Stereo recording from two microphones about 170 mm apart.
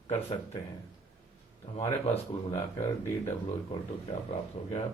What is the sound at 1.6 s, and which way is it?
Speech, 35° left (ahead or behind).